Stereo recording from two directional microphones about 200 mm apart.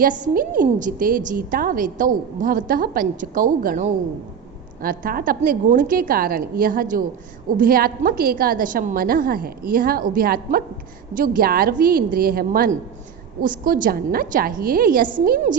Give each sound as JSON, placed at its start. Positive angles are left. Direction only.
{"t": 0.0, "sound": "a woman's voice", "side_deg": -45}